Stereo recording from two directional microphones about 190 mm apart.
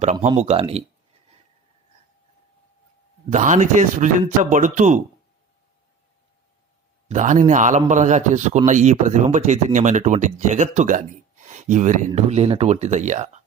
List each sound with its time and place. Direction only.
0.0 s a man's voice: 35° right (ahead or behind)
3.2 s a man's voice: 40° right (ahead or behind)
7.1 s a man's voice: 40° right (ahead or behind)